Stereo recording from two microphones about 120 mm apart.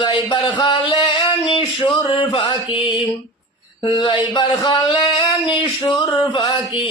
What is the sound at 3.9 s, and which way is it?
Speech, 40° left (ahead or behind).